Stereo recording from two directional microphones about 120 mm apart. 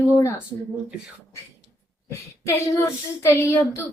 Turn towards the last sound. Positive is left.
turn(degrees=20)  # may be behind; listen again after turning